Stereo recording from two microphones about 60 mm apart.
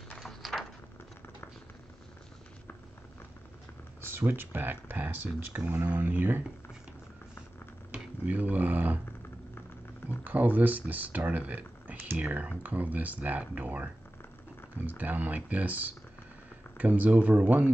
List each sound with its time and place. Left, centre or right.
0.3 s a sound: centre
4.3 s speech: right
8.3 s speech: right
10.0 s speech: right
14.9 s speech: right